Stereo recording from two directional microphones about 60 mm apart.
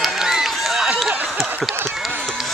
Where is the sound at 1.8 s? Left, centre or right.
Centre.